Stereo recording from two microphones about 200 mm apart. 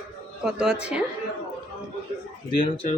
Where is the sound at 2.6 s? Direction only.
30° left (ahead or behind).